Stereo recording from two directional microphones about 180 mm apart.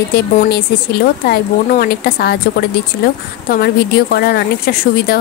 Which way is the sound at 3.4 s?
60° left (ahead or behind).